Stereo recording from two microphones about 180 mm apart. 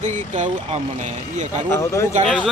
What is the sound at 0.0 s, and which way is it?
Speech, 40° right (ahead or behind).